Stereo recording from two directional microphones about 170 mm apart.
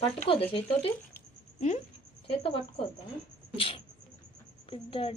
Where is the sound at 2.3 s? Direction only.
35° left (ahead or behind).